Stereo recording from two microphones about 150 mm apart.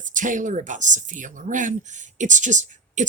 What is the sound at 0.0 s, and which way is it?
Speech, 60° right (ahead or behind).